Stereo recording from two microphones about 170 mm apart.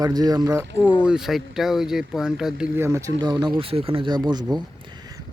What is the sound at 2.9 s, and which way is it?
Speech, 20° right (ahead or behind).